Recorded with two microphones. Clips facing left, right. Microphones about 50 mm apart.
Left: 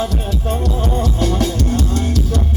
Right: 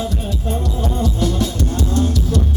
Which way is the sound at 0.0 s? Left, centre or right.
Left.